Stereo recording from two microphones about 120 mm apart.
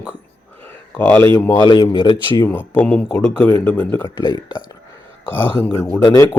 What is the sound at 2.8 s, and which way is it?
Speech, 10° left (ahead or behind).